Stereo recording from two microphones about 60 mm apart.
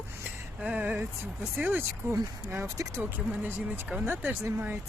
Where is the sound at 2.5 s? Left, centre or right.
Right.